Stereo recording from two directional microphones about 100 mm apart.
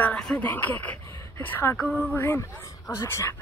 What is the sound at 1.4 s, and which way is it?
Speech, 20° left (ahead or behind).